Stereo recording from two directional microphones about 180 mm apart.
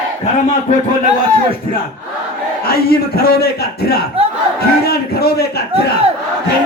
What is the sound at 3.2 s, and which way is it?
A man's voice, 60° left (ahead or behind).